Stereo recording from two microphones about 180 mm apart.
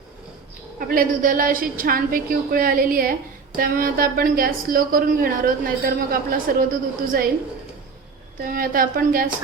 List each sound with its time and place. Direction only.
0.8 s a woman's voice: 50° right (ahead or behind)
8.4 s a woman's voice: 55° right (ahead or behind)